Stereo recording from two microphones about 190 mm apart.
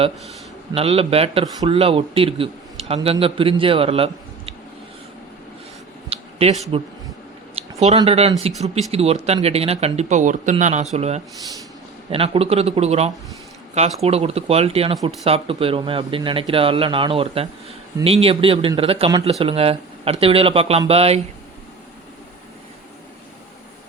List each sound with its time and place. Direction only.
0.7 s a man's voice: 30° right (ahead or behind)
6.1 s a sound: 35° right (ahead or behind)
8.0 s a man's voice: 35° right (ahead or behind)